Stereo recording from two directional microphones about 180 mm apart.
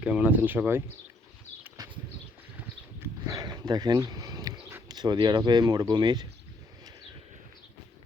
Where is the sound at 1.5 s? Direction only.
40° left (ahead or behind).